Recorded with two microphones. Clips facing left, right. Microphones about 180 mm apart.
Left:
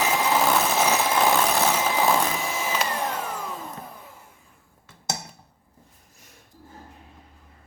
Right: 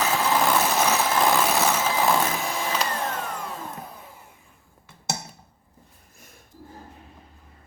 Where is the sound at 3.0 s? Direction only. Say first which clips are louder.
Left 1 dB; 10° left (ahead or behind).